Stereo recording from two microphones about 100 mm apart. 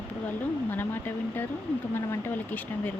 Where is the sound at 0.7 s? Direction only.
20° left (ahead or behind).